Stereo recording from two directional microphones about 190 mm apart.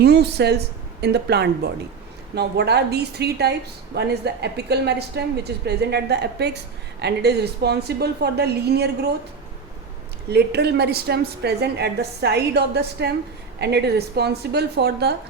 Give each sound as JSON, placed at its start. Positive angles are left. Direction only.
{"t": 0.0, "sound": "a woman's voice", "side_deg": -60}
{"t": 10.2, "sound": "a woman's voice", "side_deg": -60}